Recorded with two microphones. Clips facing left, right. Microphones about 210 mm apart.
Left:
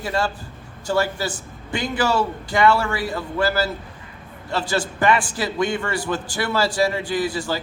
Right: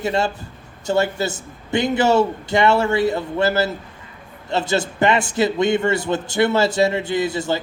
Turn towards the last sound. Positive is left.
turn(degrees=-20)  # may be behind; listen again after turning